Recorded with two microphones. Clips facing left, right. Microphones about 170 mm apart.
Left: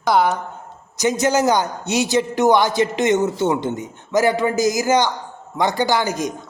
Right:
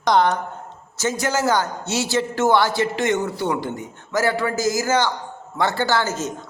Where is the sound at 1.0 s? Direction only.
20° left (ahead or behind).